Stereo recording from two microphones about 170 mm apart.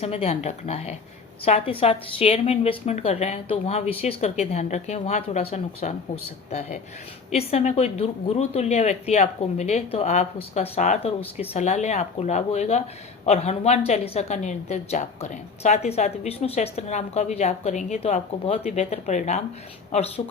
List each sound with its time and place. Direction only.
0.0 s a woman's voice: 35° left (ahead or behind)